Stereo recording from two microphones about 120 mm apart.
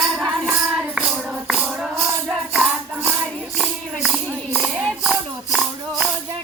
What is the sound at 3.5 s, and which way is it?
Tambourine, centre (ahead or behind).